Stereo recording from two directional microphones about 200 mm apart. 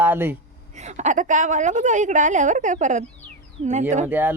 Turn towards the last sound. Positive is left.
turn(degrees=-10)  # may be behind; listen again after turning